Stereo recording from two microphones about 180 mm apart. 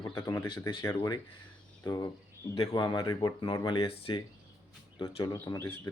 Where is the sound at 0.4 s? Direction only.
25° left (ahead or behind).